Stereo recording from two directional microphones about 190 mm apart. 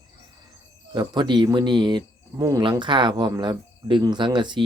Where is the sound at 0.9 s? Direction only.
20° right (ahead or behind).